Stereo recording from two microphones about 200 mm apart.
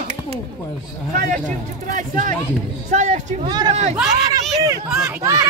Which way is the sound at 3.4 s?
20° right (ahead or behind).